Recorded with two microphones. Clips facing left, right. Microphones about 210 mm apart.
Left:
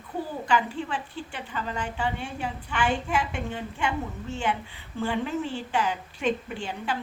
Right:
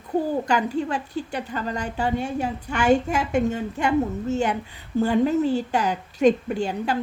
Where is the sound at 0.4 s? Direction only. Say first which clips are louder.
Right 4 dB; 40° right (ahead or behind).